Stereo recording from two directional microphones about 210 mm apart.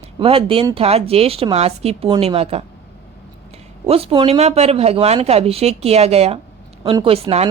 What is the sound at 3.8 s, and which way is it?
Speech, 30° right (ahead or behind).